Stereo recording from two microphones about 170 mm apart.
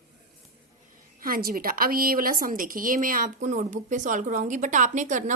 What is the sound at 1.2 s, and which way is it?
A woman's voice, 55° right (ahead or behind).